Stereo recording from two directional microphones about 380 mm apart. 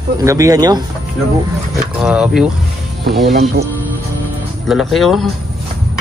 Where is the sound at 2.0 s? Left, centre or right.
Centre.